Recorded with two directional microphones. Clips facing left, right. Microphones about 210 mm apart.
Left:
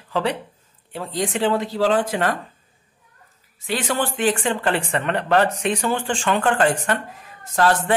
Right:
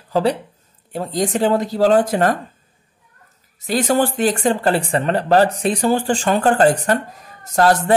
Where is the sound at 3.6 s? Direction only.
40° right (ahead or behind).